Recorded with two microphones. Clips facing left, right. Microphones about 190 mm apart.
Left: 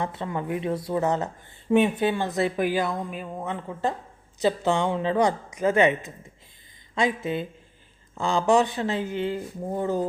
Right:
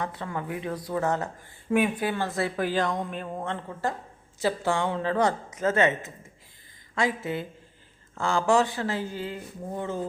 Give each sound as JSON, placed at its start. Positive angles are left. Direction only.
{"t": 0.0, "sound": "speech", "side_deg": 25}
{"t": 9.7, "sound": "speech", "side_deg": 40}